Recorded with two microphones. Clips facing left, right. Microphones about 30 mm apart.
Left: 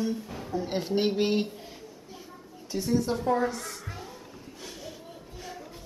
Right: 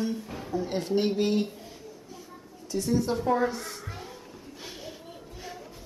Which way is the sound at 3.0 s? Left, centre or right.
Centre.